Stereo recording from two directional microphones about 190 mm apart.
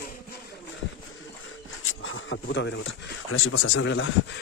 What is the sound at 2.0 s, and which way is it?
Speech, 90° left.